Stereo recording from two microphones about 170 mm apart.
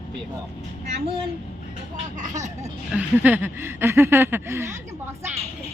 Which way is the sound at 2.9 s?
10° right (ahead or behind).